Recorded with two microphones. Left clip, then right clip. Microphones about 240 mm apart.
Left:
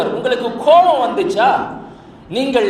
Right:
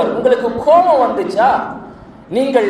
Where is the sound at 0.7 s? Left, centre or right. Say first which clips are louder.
Even; left.